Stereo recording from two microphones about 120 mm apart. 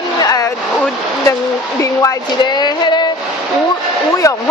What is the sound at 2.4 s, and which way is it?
Speech, 35° left (ahead or behind).